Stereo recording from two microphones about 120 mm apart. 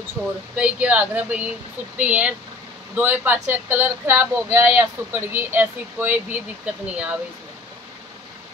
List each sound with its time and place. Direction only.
0.6 s speech: 10° right (ahead or behind)